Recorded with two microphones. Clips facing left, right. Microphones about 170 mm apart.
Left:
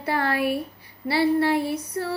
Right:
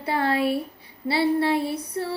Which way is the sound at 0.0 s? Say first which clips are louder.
Right 1 dB; 25° right (ahead or behind).